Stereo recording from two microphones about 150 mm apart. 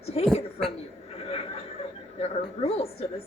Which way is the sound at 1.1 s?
40° left (ahead or behind).